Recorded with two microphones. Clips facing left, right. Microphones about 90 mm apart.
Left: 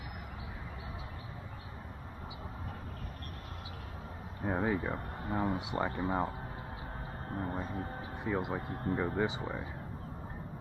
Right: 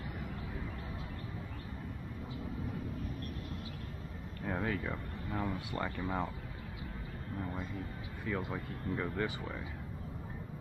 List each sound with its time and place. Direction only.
4.4 s speech: 25° left (ahead or behind)
5.7 s speech: 20° left (ahead or behind); by 7.9 s 40° left (ahead or behind)
8.2 s speech: 20° left (ahead or behind)